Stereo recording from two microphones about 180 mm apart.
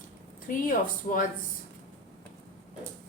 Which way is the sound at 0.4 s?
50° left (ahead or behind).